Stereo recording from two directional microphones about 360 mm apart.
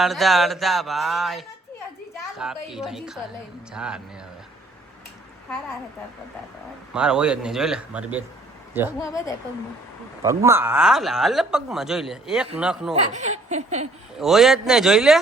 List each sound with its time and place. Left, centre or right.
0.0 s speech: centre
6.9 s speech: centre
9.0 s speech: centre
10.2 s speech: centre
12.9 s speech: centre
14.2 s speech: centre